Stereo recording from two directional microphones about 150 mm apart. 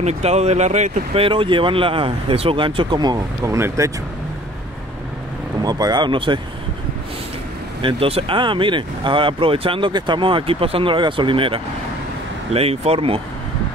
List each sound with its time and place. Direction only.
0.0 s speech: 45° right (ahead or behind); by 3.9 s 20° right (ahead or behind)
5.6 s speech: 25° right (ahead or behind)
7.8 s speech: 40° right (ahead or behind)